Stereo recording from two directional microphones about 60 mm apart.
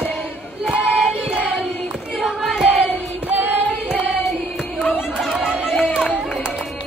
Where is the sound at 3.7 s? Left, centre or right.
Left.